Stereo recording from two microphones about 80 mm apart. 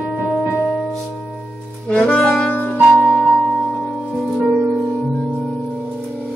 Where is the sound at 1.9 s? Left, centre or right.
Centre.